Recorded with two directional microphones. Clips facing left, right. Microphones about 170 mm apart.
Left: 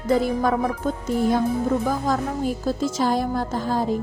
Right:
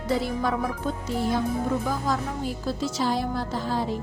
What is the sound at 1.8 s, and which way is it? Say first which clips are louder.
Speech: left 4 dB; 50° left (ahead or behind).